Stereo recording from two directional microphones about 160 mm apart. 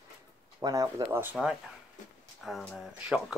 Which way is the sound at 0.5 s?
20° right (ahead or behind).